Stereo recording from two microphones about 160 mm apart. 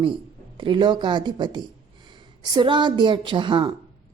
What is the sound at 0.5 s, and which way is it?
A woman's voice, 30° right (ahead or behind).